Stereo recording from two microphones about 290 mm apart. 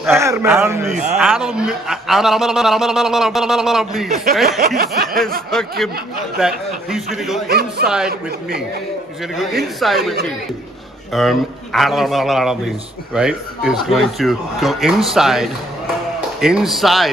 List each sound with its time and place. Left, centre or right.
0.0 s a man's voice: centre
4.6 s snicker: right
5.5 s a man's voice: centre
7.4 s a man's voice: right
7.8 s a man's voice: centre
9.6 s a man's voice: centre
11.1 s a man's voice: centre